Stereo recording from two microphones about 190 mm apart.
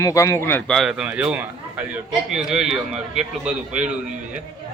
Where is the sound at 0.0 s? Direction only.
15° left (ahead or behind).